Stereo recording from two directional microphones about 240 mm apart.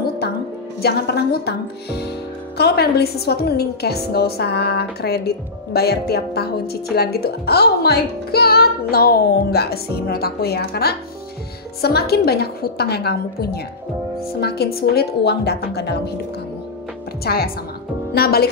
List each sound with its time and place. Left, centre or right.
0.8 s speech: left
17.2 s a woman's voice: left